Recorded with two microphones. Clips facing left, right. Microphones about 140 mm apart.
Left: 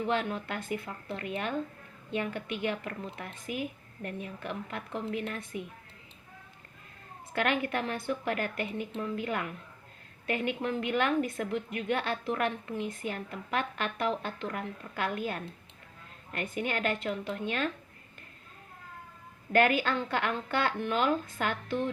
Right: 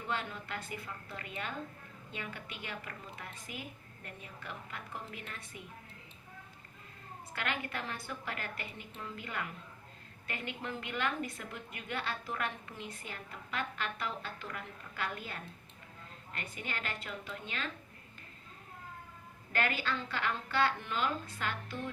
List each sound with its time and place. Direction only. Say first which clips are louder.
0.0 s a woman's voice: left 8 dB; 60° left (ahead or behind)
7.3 s a woman's voice: left 9 dB; 60° left (ahead or behind)
19.5 s speech: left 9 dB; 55° left (ahead or behind)